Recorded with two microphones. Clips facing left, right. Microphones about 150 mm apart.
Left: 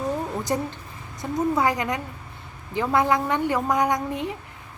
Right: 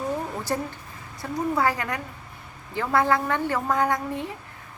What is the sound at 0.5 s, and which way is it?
Speech, 20° left (ahead or behind).